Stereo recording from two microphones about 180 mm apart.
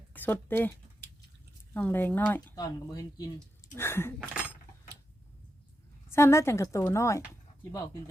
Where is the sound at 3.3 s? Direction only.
15° left (ahead or behind).